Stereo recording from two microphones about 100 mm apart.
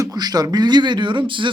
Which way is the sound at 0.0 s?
40° right (ahead or behind).